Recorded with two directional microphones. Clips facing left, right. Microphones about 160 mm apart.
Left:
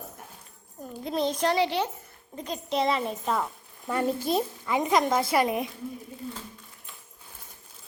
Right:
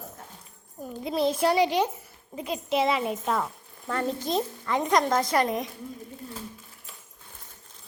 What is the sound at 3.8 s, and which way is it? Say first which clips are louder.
Speech: left 2 dB; 10° left (ahead or behind).